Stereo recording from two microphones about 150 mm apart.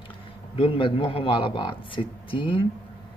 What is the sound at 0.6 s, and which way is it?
Speech, 35° left (ahead or behind).